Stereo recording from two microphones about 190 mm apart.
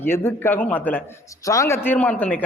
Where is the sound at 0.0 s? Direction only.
10° left (ahead or behind).